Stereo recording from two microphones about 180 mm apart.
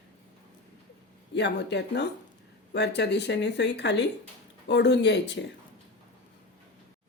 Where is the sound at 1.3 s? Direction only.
70° left (ahead or behind).